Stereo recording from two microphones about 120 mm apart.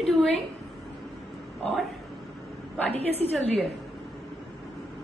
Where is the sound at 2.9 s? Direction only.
60° right (ahead or behind).